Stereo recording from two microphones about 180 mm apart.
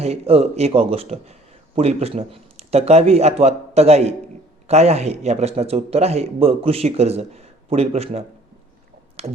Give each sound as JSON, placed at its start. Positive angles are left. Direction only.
{"t": 0.0, "sound": "a man's voice", "side_deg": -35}